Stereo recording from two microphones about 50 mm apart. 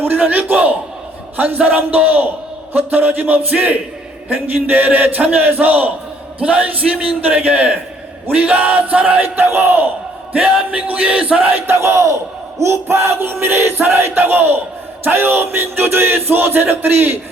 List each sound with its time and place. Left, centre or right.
0.0 s a man's voice: right
9.5 s battle cry: right
10.7 s music: right
11.5 s battle cry: right
12.5 s music: right